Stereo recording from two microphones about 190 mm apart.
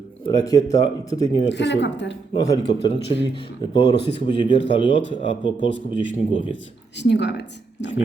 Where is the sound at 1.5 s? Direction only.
65° left (ahead or behind).